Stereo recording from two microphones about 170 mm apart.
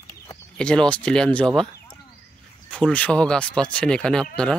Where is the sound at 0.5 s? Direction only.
5° left (ahead or behind).